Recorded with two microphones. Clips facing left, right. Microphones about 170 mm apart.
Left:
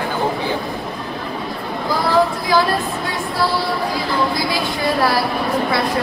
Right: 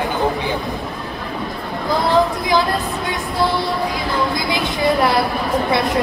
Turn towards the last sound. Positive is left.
turn(degrees=-20)  # may be behind; listen again after turning